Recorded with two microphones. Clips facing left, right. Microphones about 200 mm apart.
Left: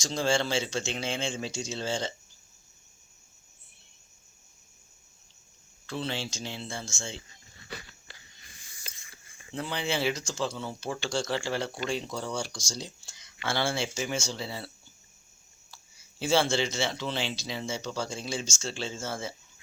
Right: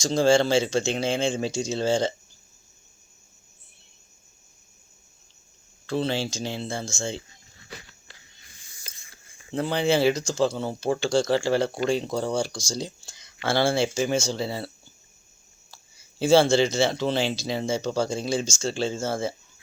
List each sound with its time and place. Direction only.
0.0 s speech: 35° right (ahead or behind)
5.8 s speech: 35° right (ahead or behind)
9.6 s speech: 40° right (ahead or behind)
15.7 s speech: 35° right (ahead or behind)